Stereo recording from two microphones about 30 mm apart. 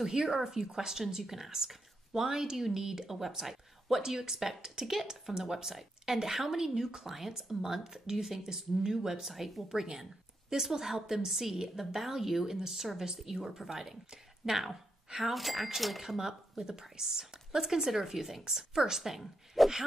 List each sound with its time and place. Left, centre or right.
0.0 s speech: centre
9.7 s speech: centre
15.2 s speech: centre
16.2 s speech: centre